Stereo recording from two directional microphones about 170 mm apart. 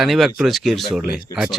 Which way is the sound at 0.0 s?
Centre (ahead or behind).